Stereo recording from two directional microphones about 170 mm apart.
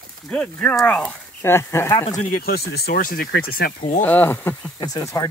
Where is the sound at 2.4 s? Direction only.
65° left (ahead or behind).